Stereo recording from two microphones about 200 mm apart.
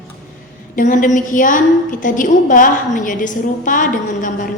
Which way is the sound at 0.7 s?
40° left (ahead or behind).